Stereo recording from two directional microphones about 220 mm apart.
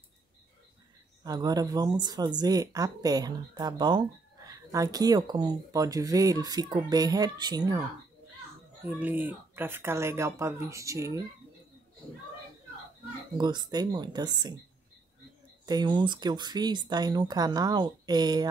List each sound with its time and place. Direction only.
1.2 s speech: 15° right (ahead or behind)
8.8 s speech: 10° right (ahead or behind)
13.4 s speech: 20° right (ahead or behind)
15.6 s speech: 20° right (ahead or behind)